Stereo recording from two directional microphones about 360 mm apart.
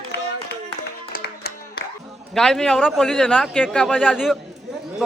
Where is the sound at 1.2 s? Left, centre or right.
Left.